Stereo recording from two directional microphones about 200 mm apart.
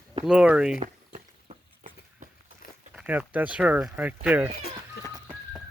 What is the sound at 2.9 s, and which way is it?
Speech, 5° right (ahead or behind).